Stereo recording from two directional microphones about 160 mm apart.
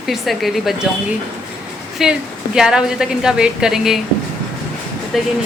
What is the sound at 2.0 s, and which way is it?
Speech, 5° right (ahead or behind).